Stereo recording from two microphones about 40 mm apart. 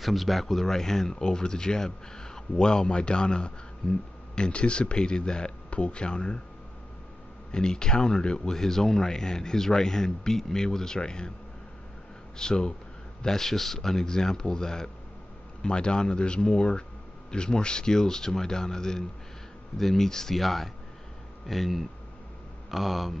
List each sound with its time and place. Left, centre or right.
0.0 s speech: centre; by 6.4 s left
7.5 s speech: centre
12.4 s speech: centre